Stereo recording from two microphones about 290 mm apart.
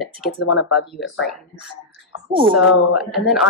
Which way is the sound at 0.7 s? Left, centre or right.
Centre.